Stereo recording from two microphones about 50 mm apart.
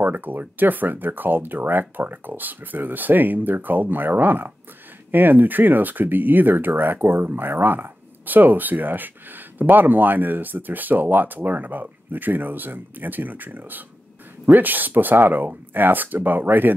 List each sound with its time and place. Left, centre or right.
0.0 s speech: right